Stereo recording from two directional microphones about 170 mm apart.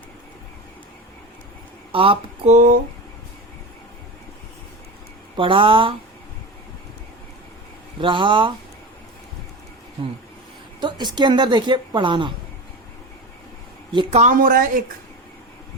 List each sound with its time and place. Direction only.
1.9 s speech: 30° right (ahead or behind)
5.4 s speech: 30° right (ahead or behind)
7.9 s speech: 30° right (ahead or behind)
10.8 s speech: 25° right (ahead or behind)
13.9 s speech: 30° right (ahead or behind)
14.2 s speech: 50° right (ahead or behind)